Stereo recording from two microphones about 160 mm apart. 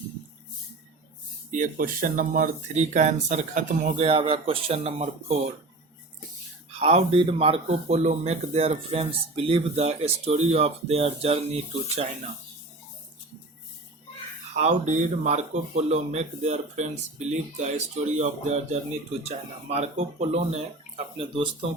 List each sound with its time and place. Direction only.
1.5 s speech: 50° right (ahead or behind)
6.7 s speech: 40° right (ahead or behind)
14.5 s speech: 50° right (ahead or behind); by 21.7 s 35° right (ahead or behind)